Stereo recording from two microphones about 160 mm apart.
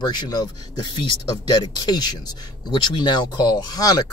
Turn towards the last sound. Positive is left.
turn(degrees=25)  # may be behind; listen again after turning